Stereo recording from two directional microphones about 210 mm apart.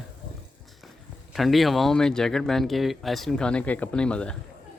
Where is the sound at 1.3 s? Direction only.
Centre (ahead or behind).